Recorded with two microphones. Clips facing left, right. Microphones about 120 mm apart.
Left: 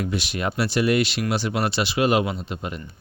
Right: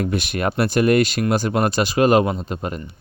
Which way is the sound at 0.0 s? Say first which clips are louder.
Right 4 dB; 50° right (ahead or behind).